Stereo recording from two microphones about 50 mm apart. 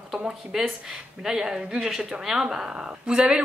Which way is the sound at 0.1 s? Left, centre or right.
Centre.